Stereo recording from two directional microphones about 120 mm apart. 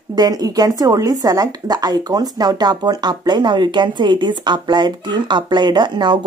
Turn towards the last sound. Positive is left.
turn(degrees=-35)  # may be behind; listen again after turning